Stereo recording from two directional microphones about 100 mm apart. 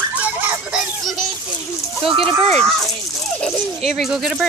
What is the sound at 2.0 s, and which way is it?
Speech, 65° right (ahead or behind).